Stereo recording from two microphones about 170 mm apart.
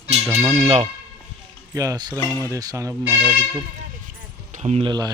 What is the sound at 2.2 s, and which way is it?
Speech, 15° left (ahead or behind).